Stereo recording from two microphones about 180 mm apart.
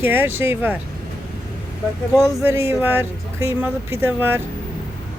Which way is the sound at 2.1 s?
20° left (ahead or behind).